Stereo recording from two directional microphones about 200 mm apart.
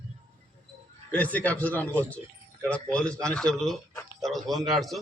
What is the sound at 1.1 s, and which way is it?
Speech, 10° left (ahead or behind).